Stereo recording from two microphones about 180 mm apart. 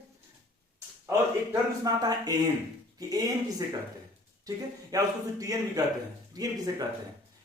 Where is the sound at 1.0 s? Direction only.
15° right (ahead or behind).